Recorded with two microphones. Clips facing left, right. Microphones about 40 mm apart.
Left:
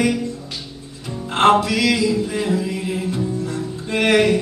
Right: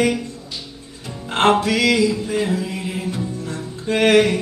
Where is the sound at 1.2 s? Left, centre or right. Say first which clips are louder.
Left 2 dB; right.